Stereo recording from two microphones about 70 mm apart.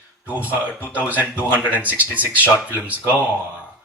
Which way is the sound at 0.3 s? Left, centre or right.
Right.